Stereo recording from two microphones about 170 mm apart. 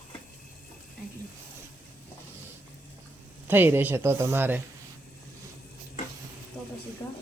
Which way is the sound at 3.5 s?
10° right (ahead or behind).